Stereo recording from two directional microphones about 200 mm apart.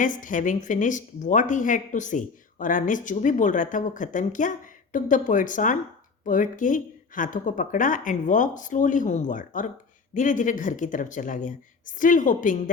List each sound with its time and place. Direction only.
0.0 s speech: 40° left (ahead or behind)